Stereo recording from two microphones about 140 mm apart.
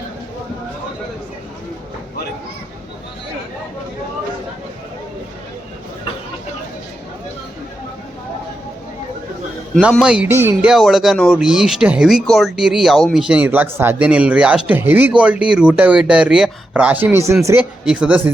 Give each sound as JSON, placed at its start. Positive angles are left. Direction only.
{"t": 10.0, "sound": "speech", "side_deg": -5}